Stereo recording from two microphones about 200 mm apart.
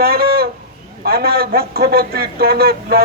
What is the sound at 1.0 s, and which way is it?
A man's voice, 50° right (ahead or behind).